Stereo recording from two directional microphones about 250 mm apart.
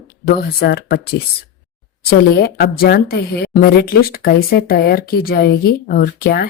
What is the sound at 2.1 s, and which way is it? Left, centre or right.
A woman's voice, left.